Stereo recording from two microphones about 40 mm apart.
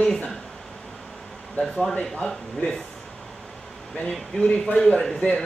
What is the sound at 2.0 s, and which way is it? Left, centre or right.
Speech, centre.